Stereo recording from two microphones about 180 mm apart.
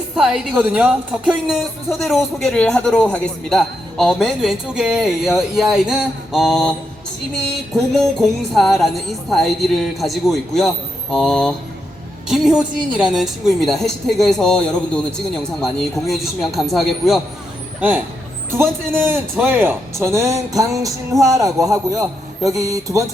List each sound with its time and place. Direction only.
0.2 s a woman's voice: 10° right (ahead or behind)
7.8 s a woman's voice: centre (ahead or behind); by 23.0 s 20° right (ahead or behind)